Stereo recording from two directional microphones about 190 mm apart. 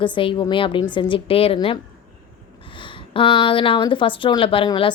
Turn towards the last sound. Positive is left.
turn(degrees=25)  # may be behind; listen again after turning